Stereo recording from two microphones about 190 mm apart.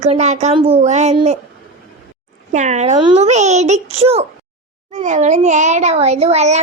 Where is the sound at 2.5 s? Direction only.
40° right (ahead or behind).